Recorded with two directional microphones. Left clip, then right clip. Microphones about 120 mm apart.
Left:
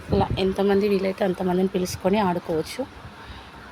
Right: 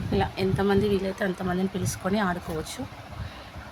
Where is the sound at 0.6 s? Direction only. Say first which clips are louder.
Left 3 dB; 20° left (ahead or behind).